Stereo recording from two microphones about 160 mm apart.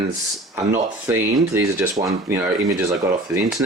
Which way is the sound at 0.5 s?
15° right (ahead or behind).